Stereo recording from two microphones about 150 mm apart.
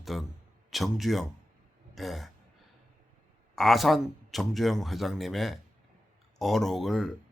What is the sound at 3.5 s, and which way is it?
A man's voice, centre (ahead or behind).